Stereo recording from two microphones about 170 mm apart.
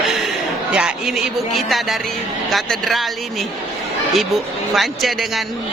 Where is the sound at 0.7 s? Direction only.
5° right (ahead or behind).